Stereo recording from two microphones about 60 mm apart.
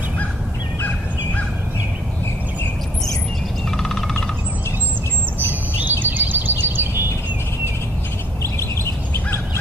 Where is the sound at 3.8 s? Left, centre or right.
Centre.